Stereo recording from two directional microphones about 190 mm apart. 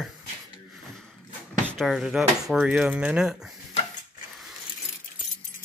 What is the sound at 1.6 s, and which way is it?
Speech, centre (ahead or behind).